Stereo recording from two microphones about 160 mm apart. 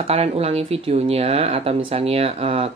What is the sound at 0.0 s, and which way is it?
Speech, 40° right (ahead or behind).